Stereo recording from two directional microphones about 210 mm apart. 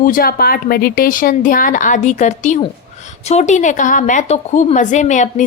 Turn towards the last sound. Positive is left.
turn(degrees=35)  # may be behind; listen again after turning